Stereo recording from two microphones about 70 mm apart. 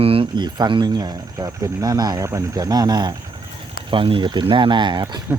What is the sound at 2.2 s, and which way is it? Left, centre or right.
Speech, right.